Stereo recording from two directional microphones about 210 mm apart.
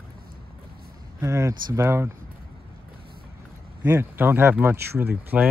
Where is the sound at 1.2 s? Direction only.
15° right (ahead or behind).